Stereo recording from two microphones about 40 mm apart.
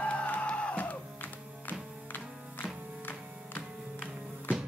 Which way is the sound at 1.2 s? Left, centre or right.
Left.